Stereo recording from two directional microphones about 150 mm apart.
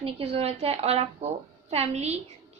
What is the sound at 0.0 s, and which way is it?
A woman's voice, 40° right (ahead or behind).